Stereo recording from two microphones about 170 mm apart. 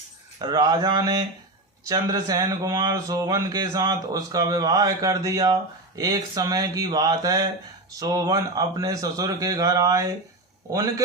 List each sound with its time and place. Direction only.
0.3 s speech: 25° right (ahead or behind)